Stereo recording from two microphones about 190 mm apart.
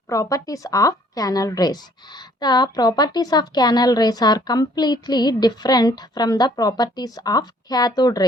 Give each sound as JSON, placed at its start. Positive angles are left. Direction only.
{"t": 0.1, "sound": "a woman's voice", "side_deg": 20}